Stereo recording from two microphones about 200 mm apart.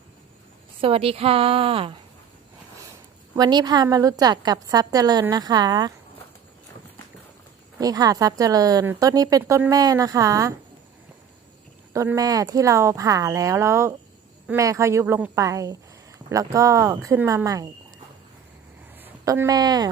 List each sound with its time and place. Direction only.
0.8 s a woman's voice: 30° right (ahead or behind)
3.3 s a woman's voice: 20° right (ahead or behind)
7.8 s a woman's voice: 20° right (ahead or behind)
11.9 s a woman's voice: 15° right (ahead or behind)
18.9 s speech: 15° right (ahead or behind)